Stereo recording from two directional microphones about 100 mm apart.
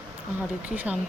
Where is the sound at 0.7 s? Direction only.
15° right (ahead or behind).